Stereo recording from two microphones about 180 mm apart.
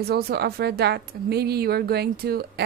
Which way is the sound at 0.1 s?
60° right (ahead or behind).